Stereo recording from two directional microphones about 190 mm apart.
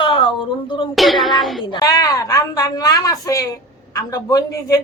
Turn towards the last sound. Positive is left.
turn(degrees=20)  # may be behind; listen again after turning